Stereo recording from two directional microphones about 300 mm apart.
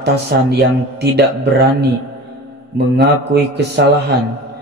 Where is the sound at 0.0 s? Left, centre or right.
Right.